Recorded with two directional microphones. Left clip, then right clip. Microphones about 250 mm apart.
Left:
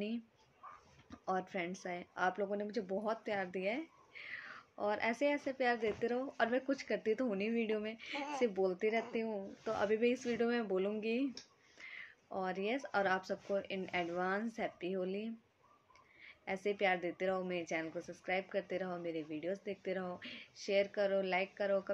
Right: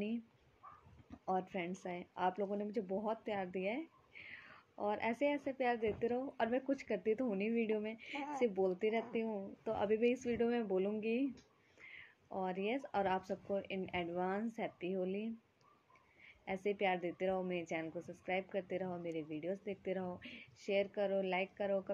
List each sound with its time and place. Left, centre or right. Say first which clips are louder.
1.1 s speech: left 1 dB; centre